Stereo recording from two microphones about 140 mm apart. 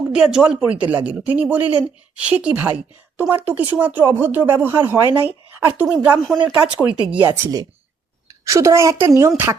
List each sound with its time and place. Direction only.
0.0 s a woman's voice: 5° right (ahead or behind); by 9.3 s 20° right (ahead or behind)